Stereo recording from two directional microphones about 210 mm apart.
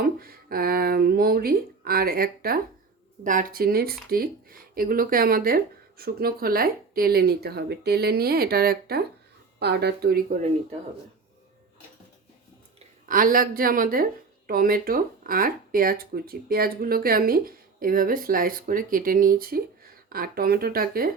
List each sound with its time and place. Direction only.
0.0 s speech: 45° right (ahead or behind)
13.1 s speech: 40° right (ahead or behind)